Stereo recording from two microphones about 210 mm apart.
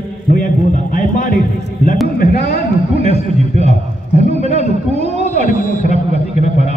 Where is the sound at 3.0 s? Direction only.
30° right (ahead or behind).